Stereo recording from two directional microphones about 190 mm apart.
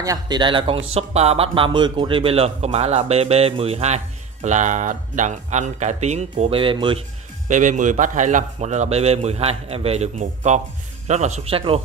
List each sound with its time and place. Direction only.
0.0 s speech: 20° right (ahead or behind)
7.4 s speech: 40° right (ahead or behind)